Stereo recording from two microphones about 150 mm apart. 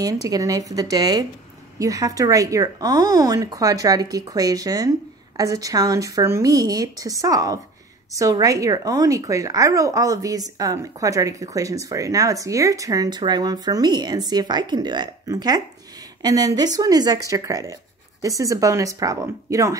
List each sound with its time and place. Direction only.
0.0 s a woman's voice: 25° right (ahead or behind)